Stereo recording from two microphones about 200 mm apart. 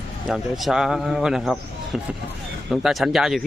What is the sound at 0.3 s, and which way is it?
A man's voice, centre (ahead or behind).